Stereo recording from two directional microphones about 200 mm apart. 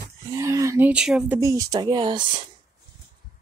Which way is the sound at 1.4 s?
15° right (ahead or behind).